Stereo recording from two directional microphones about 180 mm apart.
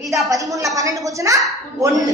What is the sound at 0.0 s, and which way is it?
Speech, centre (ahead or behind).